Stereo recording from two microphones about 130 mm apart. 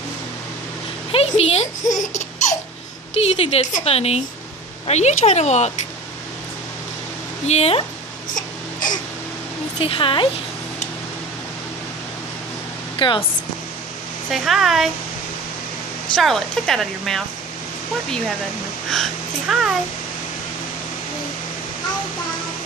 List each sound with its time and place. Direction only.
1.1 s speech: 50° left (ahead or behind)
3.2 s a woman's voice: 50° left (ahead or behind)
7.4 s a woman's voice: 55° left (ahead or behind)
9.8 s speech: 45° left (ahead or behind)
13.0 s a woman's voice: 45° left (ahead or behind)
14.3 s speech: centre (ahead or behind)
16.2 s speech: centre (ahead or behind)
18.9 s speech: centre (ahead or behind)